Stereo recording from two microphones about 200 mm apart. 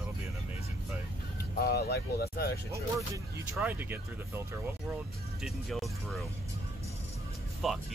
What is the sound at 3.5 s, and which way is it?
Speech, 10° right (ahead or behind).